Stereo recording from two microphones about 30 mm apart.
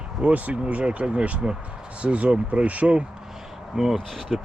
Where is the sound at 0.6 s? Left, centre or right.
Right.